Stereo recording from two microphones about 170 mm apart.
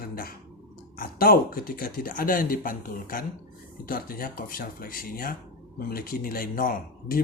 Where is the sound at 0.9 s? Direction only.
60° left (ahead or behind).